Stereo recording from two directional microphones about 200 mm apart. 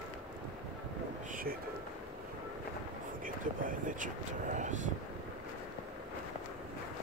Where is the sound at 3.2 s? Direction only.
40° right (ahead or behind).